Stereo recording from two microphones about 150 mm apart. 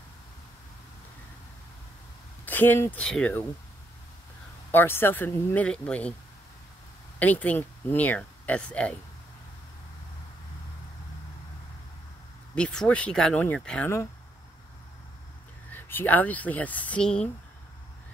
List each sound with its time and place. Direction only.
2.4 s speech: 10° left (ahead or behind)
4.6 s speech: 15° left (ahead or behind)
7.2 s speech: 10° left (ahead or behind)
12.5 s speech: 5° left (ahead or behind)
15.7 s speech: 15° left (ahead or behind)